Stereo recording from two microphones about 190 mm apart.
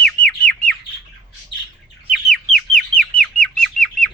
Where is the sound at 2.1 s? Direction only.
5° left (ahead or behind).